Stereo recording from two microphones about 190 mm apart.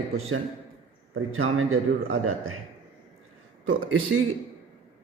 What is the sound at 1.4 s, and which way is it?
A man's voice, 90° right.